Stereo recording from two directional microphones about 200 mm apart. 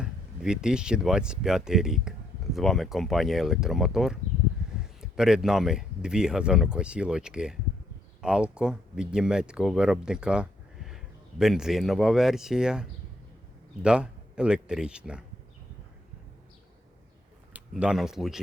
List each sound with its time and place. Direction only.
0.0 s speech: 5° right (ahead or behind)
17.5 s speech: 5° right (ahead or behind)